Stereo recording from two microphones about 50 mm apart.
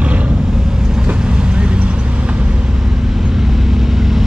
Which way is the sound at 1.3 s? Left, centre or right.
Right.